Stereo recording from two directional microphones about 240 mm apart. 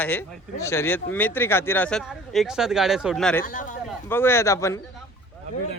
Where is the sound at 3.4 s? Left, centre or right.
Left.